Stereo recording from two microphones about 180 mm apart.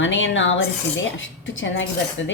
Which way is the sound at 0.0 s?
90° left.